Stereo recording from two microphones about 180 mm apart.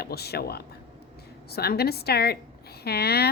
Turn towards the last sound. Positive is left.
turn(degrees=60)  # may be behind; listen again after turning